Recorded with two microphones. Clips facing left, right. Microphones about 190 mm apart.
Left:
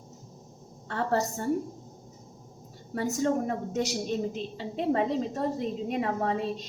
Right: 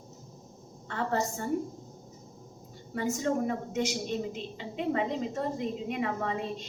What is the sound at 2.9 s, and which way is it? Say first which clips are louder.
A woman's voice: left 2 dB; 40° left (ahead or behind).